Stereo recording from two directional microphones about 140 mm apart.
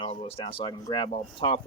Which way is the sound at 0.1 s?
45° left (ahead or behind).